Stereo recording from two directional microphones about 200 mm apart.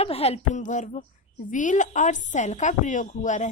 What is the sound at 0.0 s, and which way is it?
A woman's voice, 30° left (ahead or behind).